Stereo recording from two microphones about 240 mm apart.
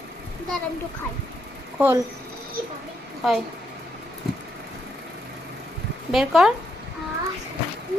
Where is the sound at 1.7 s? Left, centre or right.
Centre.